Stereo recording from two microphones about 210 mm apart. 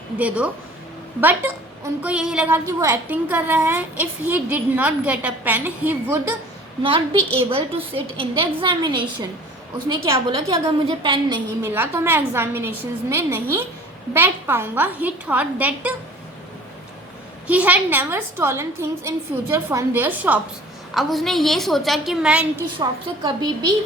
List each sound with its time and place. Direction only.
0.2 s a woman's voice: 5° right (ahead or behind)
6.8 s a woman's voice: 25° right (ahead or behind)
11.6 s a woman's voice: 10° right (ahead or behind)
17.5 s a woman's voice: 5° right (ahead or behind)
22.8 s a woman's voice: 20° right (ahead or behind)